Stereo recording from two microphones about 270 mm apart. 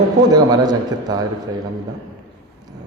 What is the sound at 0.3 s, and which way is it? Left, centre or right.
Speech, centre.